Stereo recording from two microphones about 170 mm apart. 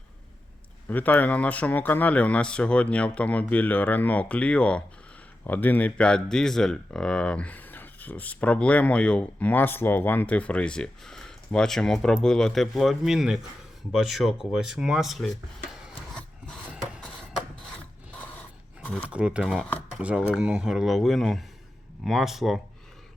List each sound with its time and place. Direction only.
0.9 s speech: 10° left (ahead or behind)
16.1 s filing: 5° left (ahead or behind)
18.8 s a sound: 10° left (ahead or behind)
19.1 s speech: 5° right (ahead or behind)